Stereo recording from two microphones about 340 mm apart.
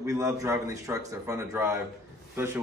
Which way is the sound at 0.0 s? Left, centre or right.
Centre.